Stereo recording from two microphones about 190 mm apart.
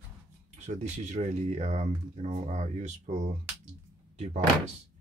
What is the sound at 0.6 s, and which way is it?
Speech, 40° right (ahead or behind).